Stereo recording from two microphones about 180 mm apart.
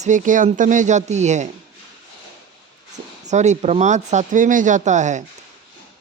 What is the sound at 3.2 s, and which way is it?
Speech, 40° right (ahead or behind).